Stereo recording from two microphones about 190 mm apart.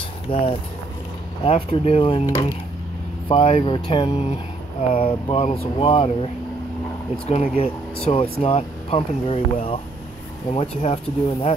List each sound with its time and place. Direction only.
0.3 s speech: 25° left (ahead or behind)